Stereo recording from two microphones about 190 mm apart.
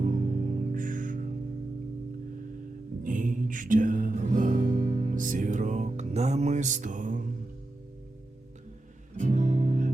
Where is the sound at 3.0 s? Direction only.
45° right (ahead or behind).